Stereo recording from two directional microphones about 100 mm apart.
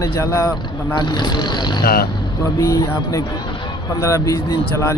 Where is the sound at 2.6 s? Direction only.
35° left (ahead or behind).